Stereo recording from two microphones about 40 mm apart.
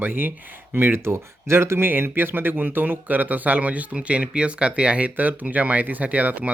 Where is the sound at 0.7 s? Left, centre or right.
Right.